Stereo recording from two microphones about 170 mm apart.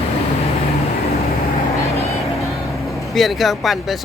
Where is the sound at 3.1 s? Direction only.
Centre (ahead or behind).